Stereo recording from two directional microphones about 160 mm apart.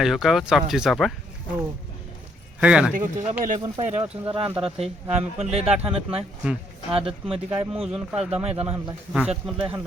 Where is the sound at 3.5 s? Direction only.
25° right (ahead or behind).